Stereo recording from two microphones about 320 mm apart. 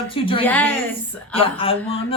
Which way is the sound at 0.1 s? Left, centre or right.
Centre.